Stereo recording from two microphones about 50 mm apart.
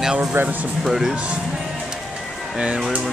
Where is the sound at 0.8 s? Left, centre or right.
Centre.